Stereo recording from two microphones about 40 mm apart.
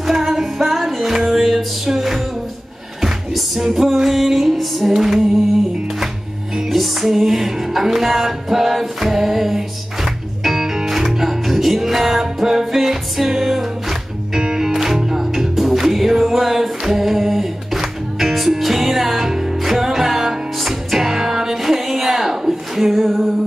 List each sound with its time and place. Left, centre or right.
0.0 s music: centre
6.7 s music: centre